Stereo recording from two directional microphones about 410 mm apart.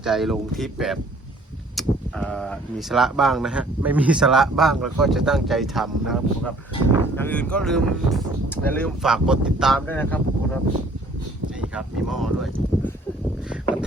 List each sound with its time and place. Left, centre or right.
0.0 s speech: centre
11.7 s speech: centre